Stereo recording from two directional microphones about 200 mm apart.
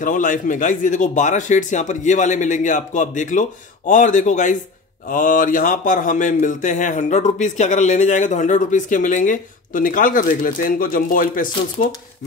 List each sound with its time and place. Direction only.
0.0 s a man's voice: 40° left (ahead or behind)